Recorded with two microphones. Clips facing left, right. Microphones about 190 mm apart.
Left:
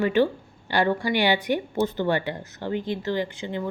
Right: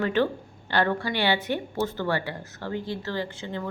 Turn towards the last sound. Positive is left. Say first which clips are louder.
# left 3 dB
turn(degrees=15)  # may be behind; listen again after turning